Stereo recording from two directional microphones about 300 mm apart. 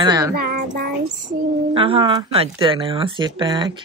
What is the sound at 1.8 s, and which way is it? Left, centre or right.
Speech, centre.